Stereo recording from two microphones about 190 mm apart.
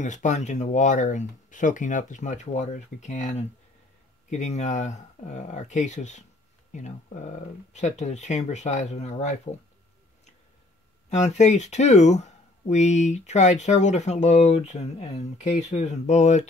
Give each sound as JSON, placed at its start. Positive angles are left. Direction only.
{"t": 0.0, "sound": "speech", "side_deg": 40}
{"t": 11.1, "sound": "speech", "side_deg": 35}